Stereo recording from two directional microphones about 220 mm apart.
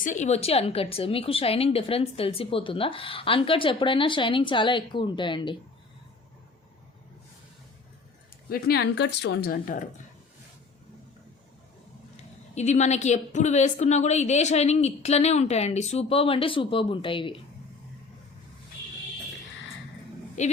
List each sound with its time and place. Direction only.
0.0 s a woman's voice: 35° left (ahead or behind)
8.4 s speech: 45° left (ahead or behind)
12.1 s a woman's voice: 30° left (ahead or behind)
20.4 s a woman's voice: 30° left (ahead or behind)